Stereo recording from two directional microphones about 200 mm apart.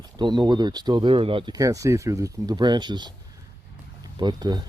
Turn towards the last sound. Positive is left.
turn(degrees=-20)  # may be behind; listen again after turning